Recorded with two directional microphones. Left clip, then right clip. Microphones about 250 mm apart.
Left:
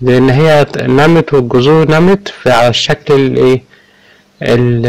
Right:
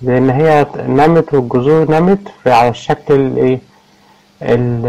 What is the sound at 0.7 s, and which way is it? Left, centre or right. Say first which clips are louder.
Speech: left 2 dB; left.